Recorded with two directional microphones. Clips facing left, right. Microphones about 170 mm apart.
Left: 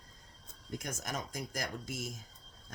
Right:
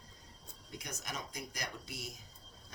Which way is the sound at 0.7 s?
50° left (ahead or behind).